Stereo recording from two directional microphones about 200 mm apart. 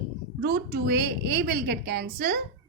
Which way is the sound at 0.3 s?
50° right (ahead or behind).